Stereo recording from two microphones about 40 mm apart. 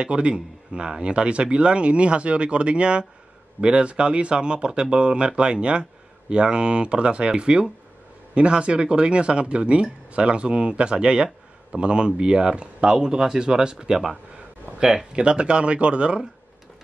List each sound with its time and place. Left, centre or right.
0.0 s speech: right